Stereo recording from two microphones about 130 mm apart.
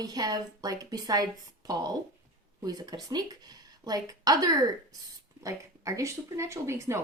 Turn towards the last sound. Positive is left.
turn(degrees=-20)  # may be behind; listen again after turning